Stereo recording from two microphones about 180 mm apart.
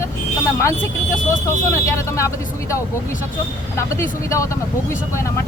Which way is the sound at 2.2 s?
15° left (ahead or behind).